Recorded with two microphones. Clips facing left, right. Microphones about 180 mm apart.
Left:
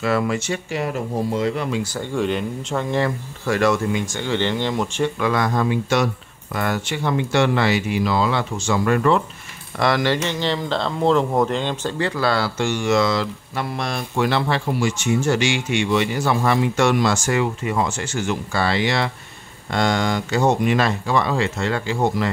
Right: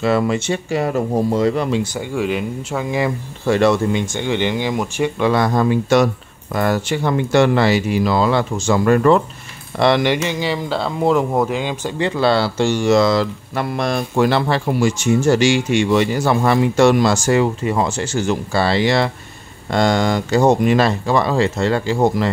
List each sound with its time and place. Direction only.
0.0 s speech: 25° right (ahead or behind)
0.7 s speech: 40° right (ahead or behind)
2.0 s speech: 5° right (ahead or behind)
3.4 s speech: 25° right (ahead or behind); by 5.1 s 10° right (ahead or behind)
5.2 s speech: 35° right (ahead or behind)
9.8 s speech: 25° right (ahead or behind)
10.1 s speech: 10° right (ahead or behind)
12.0 s speech: 25° right (ahead or behind)